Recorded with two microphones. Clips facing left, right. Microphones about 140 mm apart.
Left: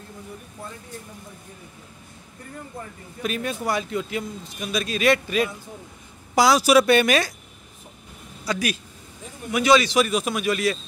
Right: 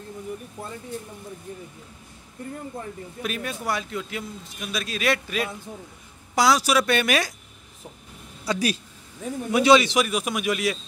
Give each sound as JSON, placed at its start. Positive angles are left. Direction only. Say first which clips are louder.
{"t": 3.2, "sound": "a man's voice", "louder": "left 4 dB", "side_deg": 0}
{"t": 8.5, "sound": "a man's voice", "louder": "right 1 dB", "side_deg": -35}
{"t": 10.0, "sound": "a man's voice", "louder": "left 2 dB", "side_deg": -10}